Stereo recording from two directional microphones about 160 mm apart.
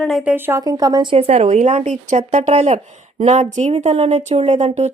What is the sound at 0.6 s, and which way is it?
Speech, 25° right (ahead or behind).